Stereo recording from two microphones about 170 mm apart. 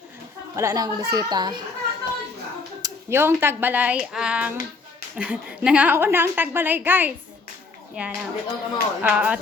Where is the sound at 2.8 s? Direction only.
15° right (ahead or behind).